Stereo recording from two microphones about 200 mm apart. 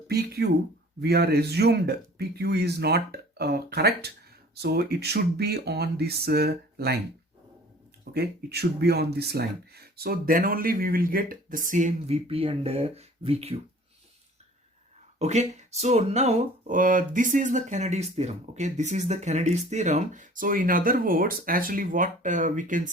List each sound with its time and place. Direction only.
0.1 s speech: 55° right (ahead or behind)
8.1 s speech: 55° right (ahead or behind); by 13.6 s 30° right (ahead or behind)
15.2 s speech: 35° right (ahead or behind)